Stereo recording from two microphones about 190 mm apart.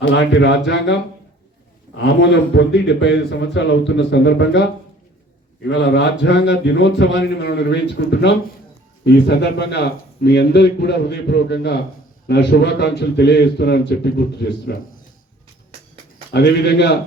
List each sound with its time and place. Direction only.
0.0 s speech: 65° left (ahead or behind)
2.0 s a man's voice: 70° left (ahead or behind)
16.3 s a man's voice: 60° left (ahead or behind)